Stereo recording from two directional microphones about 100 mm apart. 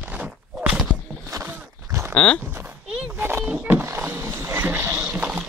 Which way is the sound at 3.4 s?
15° right (ahead or behind).